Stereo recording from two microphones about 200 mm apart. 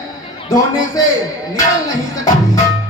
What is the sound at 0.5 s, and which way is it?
Speech, 20° left (ahead or behind).